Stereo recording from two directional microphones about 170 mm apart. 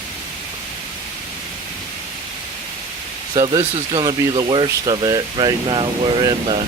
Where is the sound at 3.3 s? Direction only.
25° right (ahead or behind).